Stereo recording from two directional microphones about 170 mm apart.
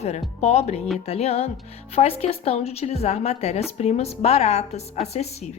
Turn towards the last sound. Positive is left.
turn(degrees=40)  # may be behind; listen again after turning